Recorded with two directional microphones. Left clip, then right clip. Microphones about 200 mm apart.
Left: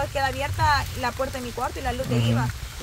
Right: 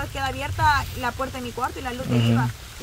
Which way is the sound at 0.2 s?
15° right (ahead or behind).